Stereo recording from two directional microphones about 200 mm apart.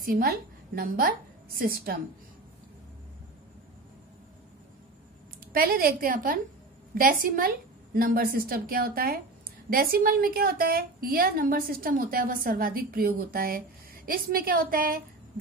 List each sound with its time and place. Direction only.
0.0 s a woman's voice: 45° right (ahead or behind)
5.5 s a woman's voice: 50° right (ahead or behind)